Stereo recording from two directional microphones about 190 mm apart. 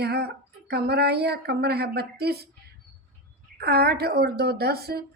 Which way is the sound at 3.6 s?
55° right (ahead or behind).